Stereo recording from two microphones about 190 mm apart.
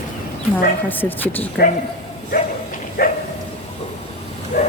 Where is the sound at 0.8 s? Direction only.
10° left (ahead or behind).